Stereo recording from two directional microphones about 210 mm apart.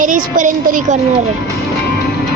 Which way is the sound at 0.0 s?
40° right (ahead or behind).